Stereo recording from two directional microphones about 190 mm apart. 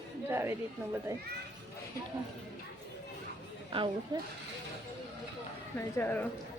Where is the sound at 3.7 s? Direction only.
25° right (ahead or behind).